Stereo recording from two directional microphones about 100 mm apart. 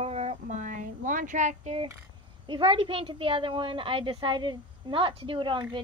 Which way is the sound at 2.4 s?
55° right (ahead or behind).